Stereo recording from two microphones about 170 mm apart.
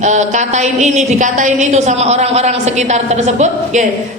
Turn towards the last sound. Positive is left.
turn(degrees=-40)  # may be behind; listen again after turning